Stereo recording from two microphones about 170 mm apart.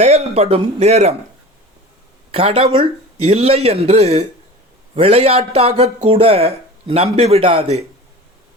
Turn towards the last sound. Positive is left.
turn(degrees=-35)  # may be behind; listen again after turning